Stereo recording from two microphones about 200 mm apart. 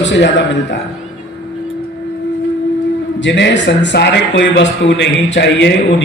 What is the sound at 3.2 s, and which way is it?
A man's voice, 60° left (ahead or behind).